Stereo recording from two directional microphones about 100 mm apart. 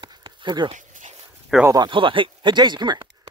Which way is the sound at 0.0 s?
50° right (ahead or behind).